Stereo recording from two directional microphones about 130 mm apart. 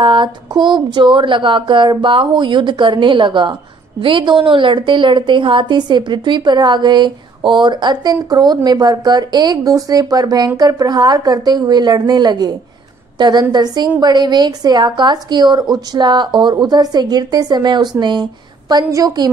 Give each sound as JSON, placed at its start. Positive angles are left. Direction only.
{"t": 0.0, "sound": "a woman's voice", "side_deg": -40}